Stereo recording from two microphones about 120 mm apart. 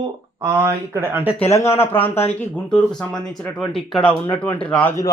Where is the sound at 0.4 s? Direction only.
20° right (ahead or behind).